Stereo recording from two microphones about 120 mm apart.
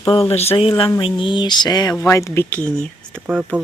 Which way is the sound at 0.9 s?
45° left (ahead or behind).